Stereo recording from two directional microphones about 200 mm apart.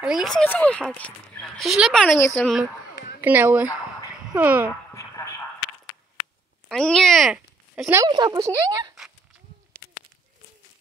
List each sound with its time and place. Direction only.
0.0 s speech: centre (ahead or behind)
3.2 s speech: 10° right (ahead or behind)
4.9 s a sound: 15° left (ahead or behind)
6.7 s a child's voice: centre (ahead or behind)
7.9 s speech: 20° right (ahead or behind)